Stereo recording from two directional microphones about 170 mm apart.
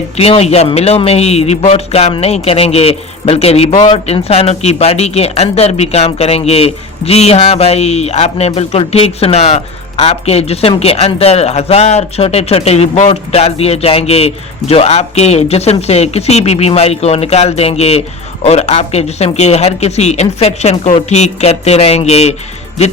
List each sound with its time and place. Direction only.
0.2 s speech: 35° left (ahead or behind)